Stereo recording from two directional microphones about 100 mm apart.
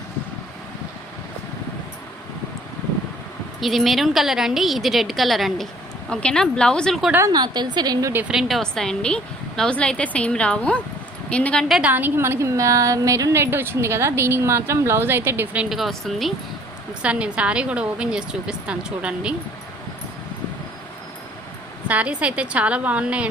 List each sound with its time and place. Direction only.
3.6 s a woman's voice: centre (ahead or behind)
7.3 s a woman's voice: 45° right (ahead or behind)
8.3 s a woman's voice: centre (ahead or behind)
11.7 s a woman's voice: 15° right (ahead or behind)
15.7 s a woman's voice: centre (ahead or behind)
17.0 s a woman's voice: 10° right (ahead or behind)
21.8 s a woman's voice: 15° right (ahead or behind)